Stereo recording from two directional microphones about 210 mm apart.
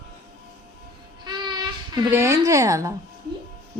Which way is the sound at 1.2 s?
20° right (ahead or behind).